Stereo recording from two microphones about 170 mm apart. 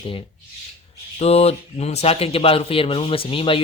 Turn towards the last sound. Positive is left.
turn(degrees=30)  # may be behind; listen again after turning